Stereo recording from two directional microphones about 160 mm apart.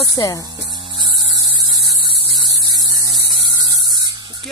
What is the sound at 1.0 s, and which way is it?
Hum, 30° right (ahead or behind).